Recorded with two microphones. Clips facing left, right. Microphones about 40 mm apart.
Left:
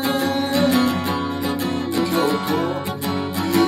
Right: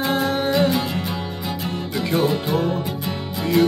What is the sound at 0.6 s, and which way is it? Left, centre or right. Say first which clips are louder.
Music: left 2 dB; left.